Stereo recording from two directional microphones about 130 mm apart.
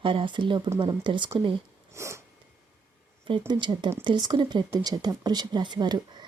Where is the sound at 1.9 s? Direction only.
20° right (ahead or behind).